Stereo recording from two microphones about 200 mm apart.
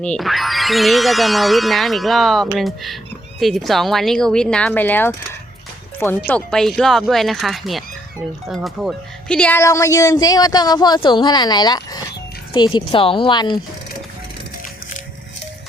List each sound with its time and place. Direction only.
0.0 s speech: 5° left (ahead or behind); by 13.6 s 25° left (ahead or behind)